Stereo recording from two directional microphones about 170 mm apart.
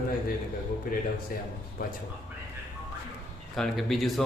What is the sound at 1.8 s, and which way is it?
Speech, 55° left (ahead or behind).